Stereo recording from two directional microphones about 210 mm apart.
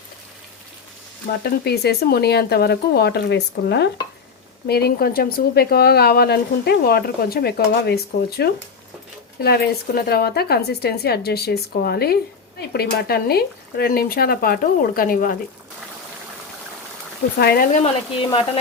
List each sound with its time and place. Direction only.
1.5 s speech: 50° left (ahead or behind)
17.3 s speech: 50° left (ahead or behind)
18.2 s speech: 25° left (ahead or behind)